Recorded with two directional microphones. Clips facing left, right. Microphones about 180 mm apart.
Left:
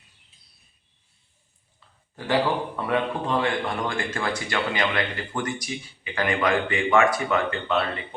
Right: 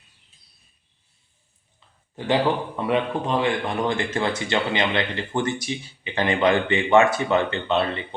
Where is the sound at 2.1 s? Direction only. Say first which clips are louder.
Right 2 dB; 20° right (ahead or behind).